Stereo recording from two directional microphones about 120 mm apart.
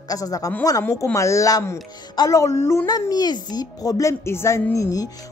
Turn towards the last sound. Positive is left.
turn(degrees=30)  # may be behind; listen again after turning